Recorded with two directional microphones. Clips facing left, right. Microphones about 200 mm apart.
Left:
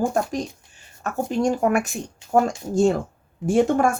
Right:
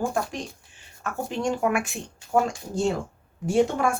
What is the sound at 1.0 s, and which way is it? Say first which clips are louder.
A woman's voice: left 6 dB; 40° left (ahead or behind).